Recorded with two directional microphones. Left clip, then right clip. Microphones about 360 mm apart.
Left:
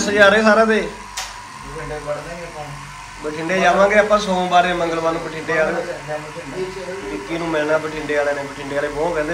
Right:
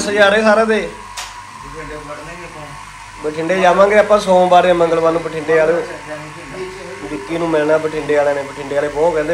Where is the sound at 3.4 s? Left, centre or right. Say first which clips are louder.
Right 3 dB; centre.